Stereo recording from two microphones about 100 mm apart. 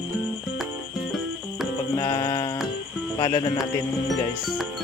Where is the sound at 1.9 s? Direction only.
35° left (ahead or behind).